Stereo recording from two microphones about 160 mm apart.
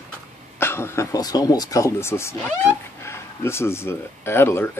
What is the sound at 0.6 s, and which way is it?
Speech, 15° left (ahead or behind).